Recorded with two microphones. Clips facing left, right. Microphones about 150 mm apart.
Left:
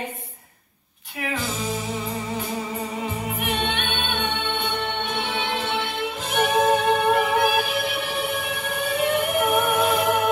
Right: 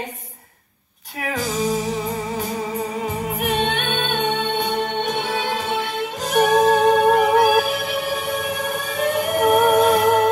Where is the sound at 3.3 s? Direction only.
40° right (ahead or behind).